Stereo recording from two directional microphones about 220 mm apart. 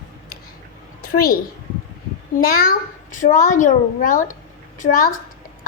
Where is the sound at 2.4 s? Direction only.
40° left (ahead or behind).